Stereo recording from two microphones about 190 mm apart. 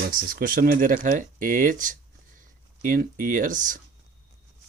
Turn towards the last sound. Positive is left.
turn(degrees=-45)  # may be behind; listen again after turning